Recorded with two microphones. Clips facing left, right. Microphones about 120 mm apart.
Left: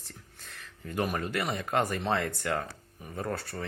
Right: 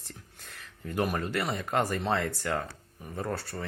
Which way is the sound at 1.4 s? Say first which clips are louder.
Even; 5° left (ahead or behind).